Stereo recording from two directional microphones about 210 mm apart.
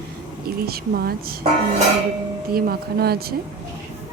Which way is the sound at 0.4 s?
45° right (ahead or behind).